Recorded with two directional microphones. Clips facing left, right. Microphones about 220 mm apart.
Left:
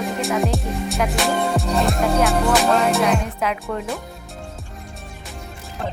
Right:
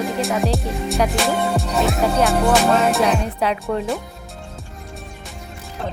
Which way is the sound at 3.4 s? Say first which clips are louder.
Right 3 dB; 30° right (ahead or behind).